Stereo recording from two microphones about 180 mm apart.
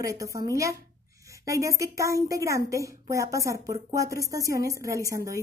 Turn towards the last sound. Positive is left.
turn(degrees=-20)  # may be behind; listen again after turning